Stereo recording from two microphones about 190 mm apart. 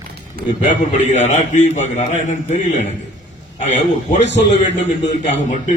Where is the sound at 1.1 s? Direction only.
35° left (ahead or behind).